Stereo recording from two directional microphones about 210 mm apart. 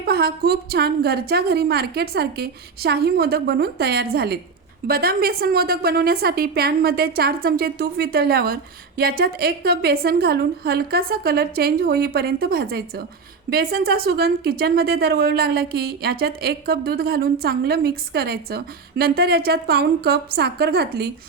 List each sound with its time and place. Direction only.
0.0 s a woman's voice: 50° right (ahead or behind)